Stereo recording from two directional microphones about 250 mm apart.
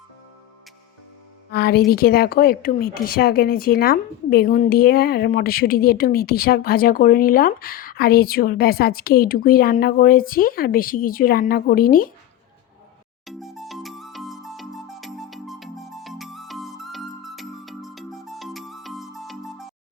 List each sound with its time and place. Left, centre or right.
1.5 s speech: left
13.2 s music: centre